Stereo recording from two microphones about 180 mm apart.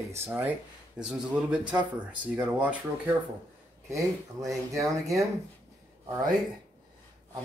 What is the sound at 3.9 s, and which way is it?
Speech, 15° right (ahead or behind).